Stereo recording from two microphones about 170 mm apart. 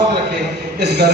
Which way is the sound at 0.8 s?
75° right (ahead or behind).